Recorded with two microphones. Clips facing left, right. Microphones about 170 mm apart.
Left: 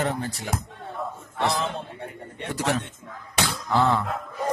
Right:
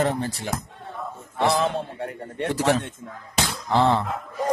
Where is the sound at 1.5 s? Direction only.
55° right (ahead or behind).